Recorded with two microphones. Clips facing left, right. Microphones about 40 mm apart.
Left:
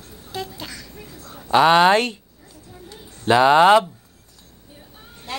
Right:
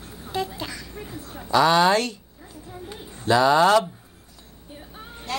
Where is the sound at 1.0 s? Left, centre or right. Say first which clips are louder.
Right 3 dB; right.